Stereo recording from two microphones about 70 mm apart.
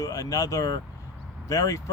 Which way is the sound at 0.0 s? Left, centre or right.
Left.